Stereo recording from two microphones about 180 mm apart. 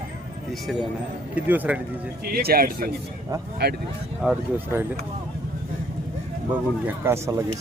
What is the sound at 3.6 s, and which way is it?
Speech, 65° right (ahead or behind).